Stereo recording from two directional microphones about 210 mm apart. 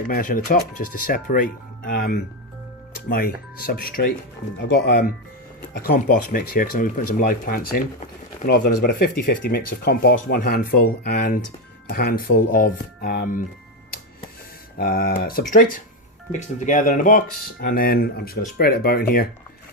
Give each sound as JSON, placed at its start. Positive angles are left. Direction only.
{"t": 0.1, "sound": "speech", "side_deg": 40}
{"t": 14.8, "sound": "speech", "side_deg": 45}